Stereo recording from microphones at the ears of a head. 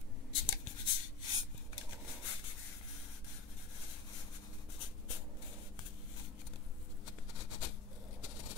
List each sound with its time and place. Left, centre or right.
0.3 s writing: left
4.7 s writing: left
7.1 s a sound: left